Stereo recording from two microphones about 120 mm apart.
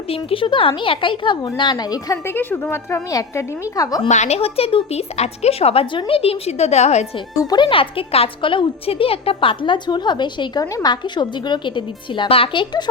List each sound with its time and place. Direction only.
0.1 s a woman's voice: 50° left (ahead or behind); by 2.1 s 35° left (ahead or behind)
2.2 s a woman's voice: 15° left (ahead or behind)
4.1 s speech: 70° left (ahead or behind)
7.3 s a woman's voice: 40° left (ahead or behind)